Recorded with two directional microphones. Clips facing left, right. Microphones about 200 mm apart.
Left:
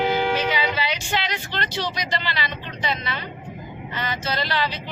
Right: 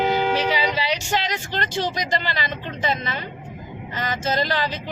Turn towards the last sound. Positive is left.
turn(degrees=-45)  # may be behind; listen again after turning